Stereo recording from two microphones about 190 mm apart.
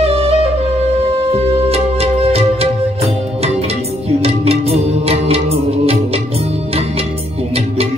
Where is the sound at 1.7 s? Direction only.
30° right (ahead or behind).